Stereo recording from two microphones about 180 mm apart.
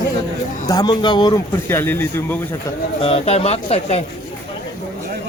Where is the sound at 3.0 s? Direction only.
35° left (ahead or behind).